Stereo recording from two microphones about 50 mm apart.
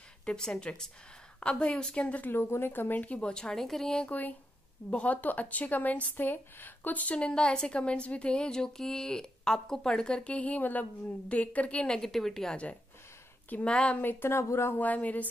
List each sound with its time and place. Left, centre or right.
0.2 s a woman's voice: centre
2.2 s speech: left
3.1 s a woman's voice: centre
3.6 s speech: centre
4.1 s speech: left
11.9 s a woman's voice: centre
13.7 s speech: left
14.0 s speech: left
14.8 s speech: left